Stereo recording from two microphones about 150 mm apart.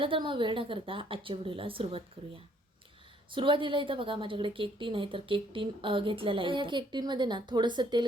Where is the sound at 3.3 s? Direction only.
35° right (ahead or behind).